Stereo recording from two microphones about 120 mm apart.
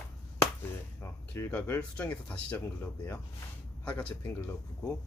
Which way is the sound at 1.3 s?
15° left (ahead or behind).